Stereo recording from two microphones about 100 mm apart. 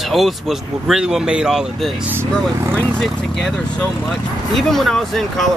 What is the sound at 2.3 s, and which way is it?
Speech, 5° left (ahead or behind).